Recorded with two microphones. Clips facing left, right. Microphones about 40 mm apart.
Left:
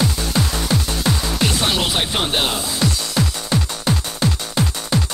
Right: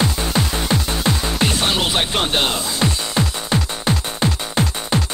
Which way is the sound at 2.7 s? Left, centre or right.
Right.